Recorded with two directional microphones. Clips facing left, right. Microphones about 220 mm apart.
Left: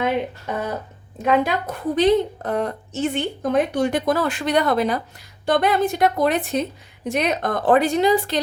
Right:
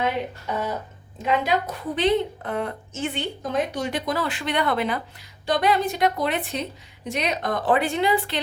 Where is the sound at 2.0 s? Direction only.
40° left (ahead or behind).